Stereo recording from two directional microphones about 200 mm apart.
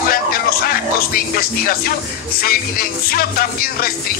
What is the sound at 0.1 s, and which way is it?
Music, 50° left (ahead or behind).